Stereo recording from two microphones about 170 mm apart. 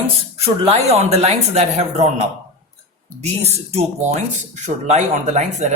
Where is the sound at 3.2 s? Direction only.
40° right (ahead or behind).